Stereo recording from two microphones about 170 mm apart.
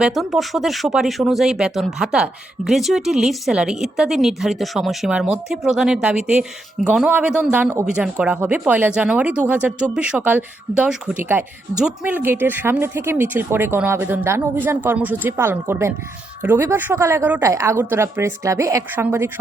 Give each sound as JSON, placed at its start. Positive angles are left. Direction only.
{"t": 0.0, "sound": "speech", "side_deg": 0}